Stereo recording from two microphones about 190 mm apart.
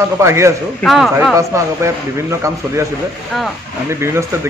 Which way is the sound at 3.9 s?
15° right (ahead or behind).